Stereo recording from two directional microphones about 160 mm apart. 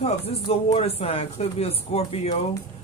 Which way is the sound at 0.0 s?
40° left (ahead or behind).